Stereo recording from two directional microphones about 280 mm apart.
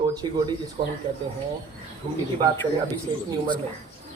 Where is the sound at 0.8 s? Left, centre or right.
Right.